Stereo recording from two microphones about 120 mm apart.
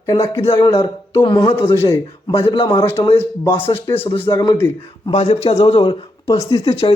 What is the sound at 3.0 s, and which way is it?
Speech, 40° left (ahead or behind).